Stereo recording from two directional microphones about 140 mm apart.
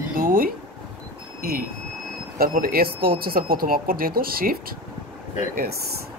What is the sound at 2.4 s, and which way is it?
Speech, 90° right.